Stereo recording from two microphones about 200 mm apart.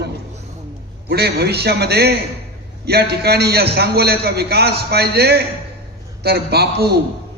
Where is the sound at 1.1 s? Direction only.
55° right (ahead or behind).